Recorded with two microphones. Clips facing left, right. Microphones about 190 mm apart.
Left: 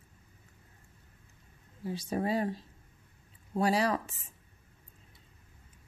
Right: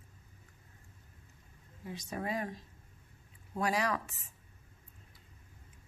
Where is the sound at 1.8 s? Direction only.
30° left (ahead or behind).